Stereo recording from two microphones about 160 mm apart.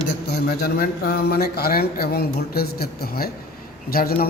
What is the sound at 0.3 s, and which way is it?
A man's voice, 80° left.